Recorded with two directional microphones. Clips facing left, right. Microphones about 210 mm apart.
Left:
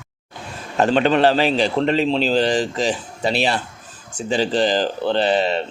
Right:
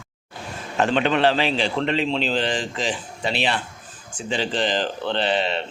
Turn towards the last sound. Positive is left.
turn(degrees=40)  # may be behind; listen again after turning